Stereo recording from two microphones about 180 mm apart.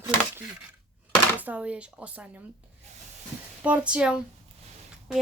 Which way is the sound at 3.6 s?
5° right (ahead or behind).